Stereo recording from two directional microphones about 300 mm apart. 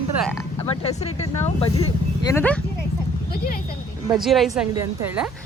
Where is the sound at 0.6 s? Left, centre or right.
Centre.